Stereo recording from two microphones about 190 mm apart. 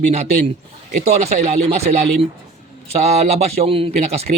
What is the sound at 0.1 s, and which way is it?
Speech, 35° right (ahead or behind).